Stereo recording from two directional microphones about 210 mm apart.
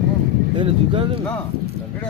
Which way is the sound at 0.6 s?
25° right (ahead or behind).